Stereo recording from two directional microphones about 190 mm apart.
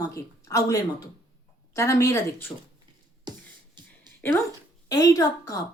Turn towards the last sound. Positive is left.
turn(degrees=15)  # may be behind; listen again after turning